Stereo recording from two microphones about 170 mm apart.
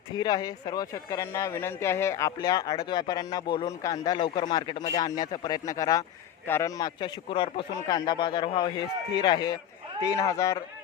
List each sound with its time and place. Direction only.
0.1 s speech: 25° left (ahead or behind)